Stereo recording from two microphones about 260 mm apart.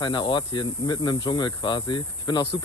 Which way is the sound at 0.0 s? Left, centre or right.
Centre.